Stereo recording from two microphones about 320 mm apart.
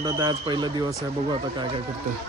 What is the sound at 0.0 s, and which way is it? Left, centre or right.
Speech, centre.